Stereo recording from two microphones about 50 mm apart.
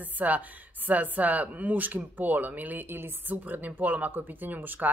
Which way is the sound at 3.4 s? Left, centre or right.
Right.